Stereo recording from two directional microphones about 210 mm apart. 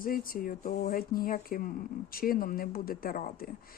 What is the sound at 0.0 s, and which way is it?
Speech, 40° left (ahead or behind).